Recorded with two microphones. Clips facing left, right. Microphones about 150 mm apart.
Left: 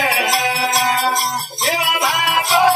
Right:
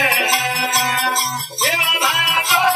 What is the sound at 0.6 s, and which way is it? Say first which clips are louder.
Music: left 3 dB; 35° left (ahead or behind).